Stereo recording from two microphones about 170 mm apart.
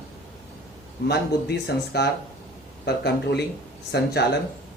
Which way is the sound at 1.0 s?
75° left (ahead or behind).